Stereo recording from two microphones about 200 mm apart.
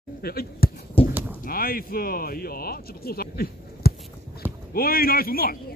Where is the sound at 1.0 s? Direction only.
25° left (ahead or behind).